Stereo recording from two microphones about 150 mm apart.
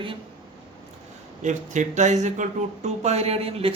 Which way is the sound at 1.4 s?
55° right (ahead or behind).